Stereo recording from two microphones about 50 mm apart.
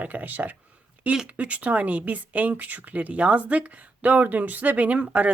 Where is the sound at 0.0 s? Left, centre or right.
Right.